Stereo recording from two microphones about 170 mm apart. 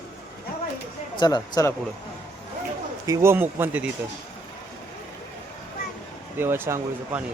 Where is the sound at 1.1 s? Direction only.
25° left (ahead or behind).